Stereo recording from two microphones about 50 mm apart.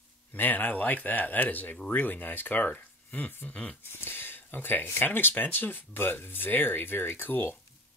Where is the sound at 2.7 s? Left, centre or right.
Left.